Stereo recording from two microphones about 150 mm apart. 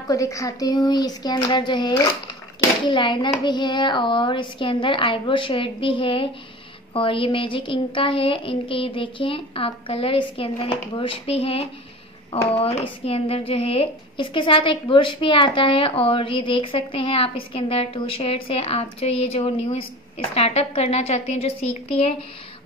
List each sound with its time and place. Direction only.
0.1 s a child's voice: 20° left (ahead or behind); by 22.1 s 45° left (ahead or behind)